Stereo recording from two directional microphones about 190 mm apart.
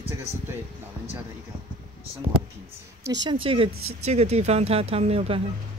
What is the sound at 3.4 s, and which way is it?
Speech, 30° right (ahead or behind).